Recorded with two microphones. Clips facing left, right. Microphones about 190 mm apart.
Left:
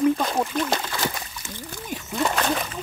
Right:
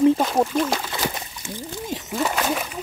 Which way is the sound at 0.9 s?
20° right (ahead or behind).